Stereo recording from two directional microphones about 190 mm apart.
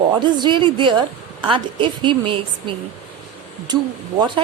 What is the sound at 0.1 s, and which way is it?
A woman's voice, 25° right (ahead or behind).